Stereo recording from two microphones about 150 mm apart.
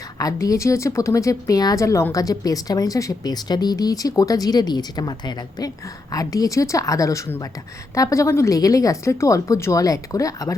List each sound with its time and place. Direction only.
0.2 s speech: 25° left (ahead or behind)